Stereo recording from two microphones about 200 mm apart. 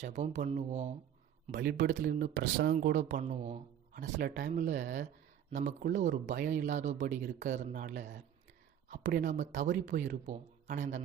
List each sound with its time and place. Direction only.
0.2 s speech: 35° right (ahead or behind)
1.5 s speech: 50° right (ahead or behind)
2.3 s speech: 75° right (ahead or behind)
2.8 s speech: 40° right (ahead or behind)
3.2 s speech: 30° right (ahead or behind)
3.9 s speech: 45° right (ahead or behind)